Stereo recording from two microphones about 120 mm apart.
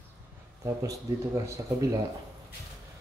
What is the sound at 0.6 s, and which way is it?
Speech, 25° right (ahead or behind).